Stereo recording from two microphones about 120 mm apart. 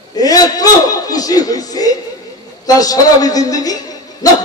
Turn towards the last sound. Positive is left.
turn(degrees=30)  # may be behind; listen again after turning